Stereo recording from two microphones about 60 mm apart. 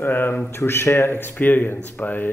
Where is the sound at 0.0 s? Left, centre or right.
Left.